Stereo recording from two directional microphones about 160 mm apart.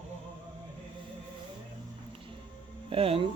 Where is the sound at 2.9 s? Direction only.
35° right (ahead or behind).